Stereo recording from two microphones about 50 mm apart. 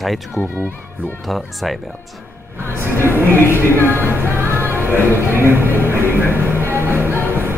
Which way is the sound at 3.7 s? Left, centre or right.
Left.